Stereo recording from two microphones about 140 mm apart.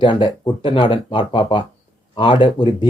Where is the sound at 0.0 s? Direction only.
35° left (ahead or behind).